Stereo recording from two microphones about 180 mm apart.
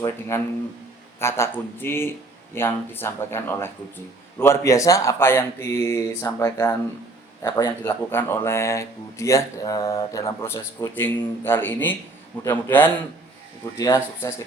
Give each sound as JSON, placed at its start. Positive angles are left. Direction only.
{"t": 0.0, "sound": "speech", "side_deg": 15}